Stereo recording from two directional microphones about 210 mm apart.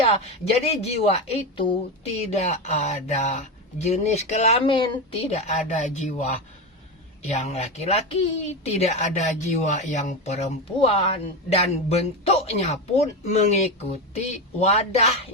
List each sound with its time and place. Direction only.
0.1 s speech: 30° left (ahead or behind)